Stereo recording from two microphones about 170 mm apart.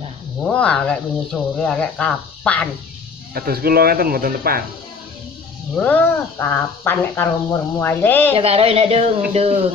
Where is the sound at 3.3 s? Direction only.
65° right (ahead or behind).